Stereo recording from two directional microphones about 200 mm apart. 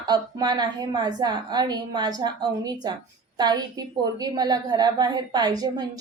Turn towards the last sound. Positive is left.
turn(degrees=-20)  # may be behind; listen again after turning